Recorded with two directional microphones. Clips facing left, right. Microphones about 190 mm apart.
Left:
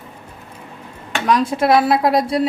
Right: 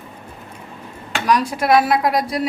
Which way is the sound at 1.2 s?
25° left (ahead or behind).